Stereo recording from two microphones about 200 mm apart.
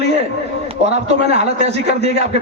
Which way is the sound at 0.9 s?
30° right (ahead or behind).